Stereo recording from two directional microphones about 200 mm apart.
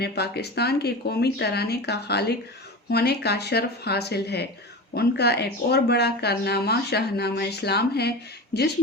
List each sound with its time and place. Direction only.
0.0 s speech: 55° left (ahead or behind)